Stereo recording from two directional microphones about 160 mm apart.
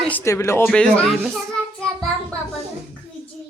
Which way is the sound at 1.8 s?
5° left (ahead or behind).